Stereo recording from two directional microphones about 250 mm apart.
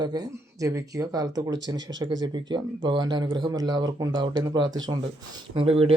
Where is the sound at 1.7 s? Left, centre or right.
Right.